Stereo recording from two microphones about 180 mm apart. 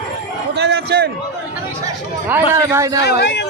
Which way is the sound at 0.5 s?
65° right (ahead or behind).